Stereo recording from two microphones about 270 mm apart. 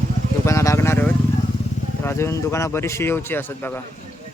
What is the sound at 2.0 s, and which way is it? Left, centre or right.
Speech, centre.